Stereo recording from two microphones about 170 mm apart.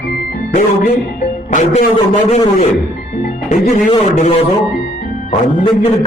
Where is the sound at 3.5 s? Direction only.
45° left (ahead or behind).